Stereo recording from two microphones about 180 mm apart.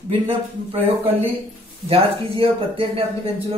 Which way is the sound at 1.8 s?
30° right (ahead or behind).